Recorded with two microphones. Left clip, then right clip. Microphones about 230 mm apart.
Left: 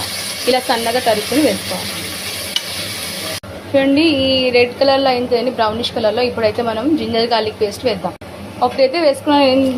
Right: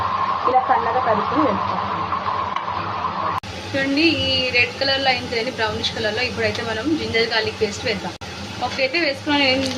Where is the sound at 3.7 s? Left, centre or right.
Left.